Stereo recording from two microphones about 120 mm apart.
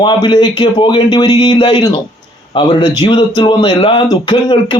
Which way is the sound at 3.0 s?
40° left (ahead or behind).